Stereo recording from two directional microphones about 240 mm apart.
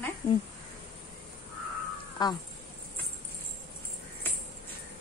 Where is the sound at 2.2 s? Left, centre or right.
Centre.